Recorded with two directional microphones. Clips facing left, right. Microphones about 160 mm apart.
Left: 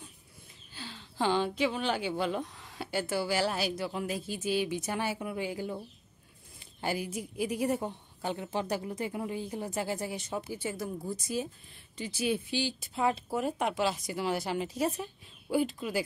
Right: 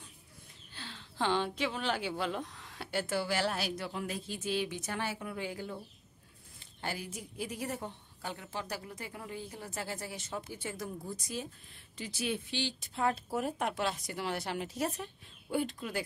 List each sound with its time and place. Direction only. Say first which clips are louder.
0.7 s a woman's voice: left 3 dB; 5° left (ahead or behind)